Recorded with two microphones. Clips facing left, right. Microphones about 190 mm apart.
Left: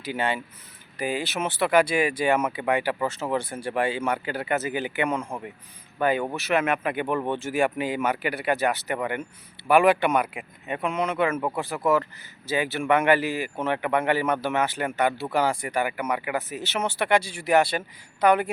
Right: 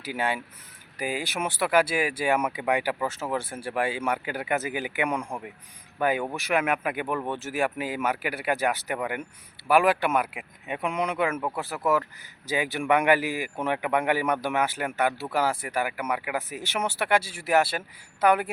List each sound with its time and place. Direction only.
0.0 s speech: 10° right (ahead or behind)